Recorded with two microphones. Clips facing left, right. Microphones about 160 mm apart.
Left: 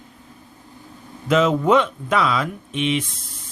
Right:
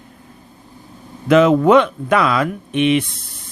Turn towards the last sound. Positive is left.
turn(degrees=-65)  # may be behind; listen again after turning